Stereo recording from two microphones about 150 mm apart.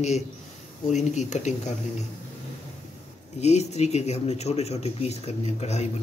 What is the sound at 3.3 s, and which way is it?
Speech, 45° left (ahead or behind).